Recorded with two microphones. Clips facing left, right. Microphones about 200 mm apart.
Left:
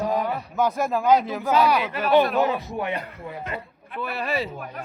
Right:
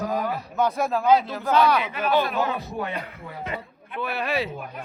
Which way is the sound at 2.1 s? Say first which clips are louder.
Left 6 dB; 20° left (ahead or behind).